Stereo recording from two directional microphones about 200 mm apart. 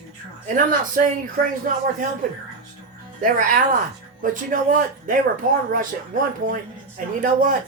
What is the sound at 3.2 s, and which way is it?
Speech, 40° right (ahead or behind).